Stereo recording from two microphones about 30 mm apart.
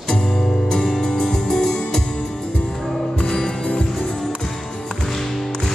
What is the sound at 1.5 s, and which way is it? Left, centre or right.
Music, centre.